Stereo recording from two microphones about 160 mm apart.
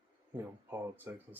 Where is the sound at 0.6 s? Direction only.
10° right (ahead or behind).